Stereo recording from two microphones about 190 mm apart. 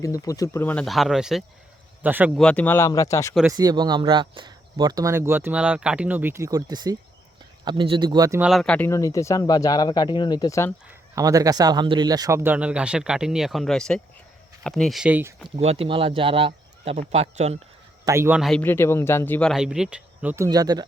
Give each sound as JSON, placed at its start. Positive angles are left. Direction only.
{"t": 0.0, "sound": "speech", "side_deg": 15}
{"t": 2.4, "sound": "speech", "side_deg": 5}
{"t": 3.4, "sound": "speech", "side_deg": -20}
{"t": 8.4, "sound": "speech", "side_deg": 0}
{"t": 8.9, "sound": "speech", "side_deg": 15}
{"t": 10.8, "sound": "speech", "side_deg": -15}
{"t": 15.4, "sound": "speech", "side_deg": -35}
{"t": 18.0, "sound": "speech", "side_deg": -15}
{"t": 18.6, "sound": "speech", "side_deg": 10}